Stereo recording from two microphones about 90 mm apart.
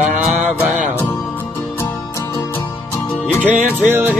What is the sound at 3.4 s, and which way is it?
Music, 20° right (ahead or behind).